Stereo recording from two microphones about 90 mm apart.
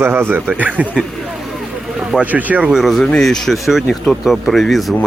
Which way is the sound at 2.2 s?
20° right (ahead or behind).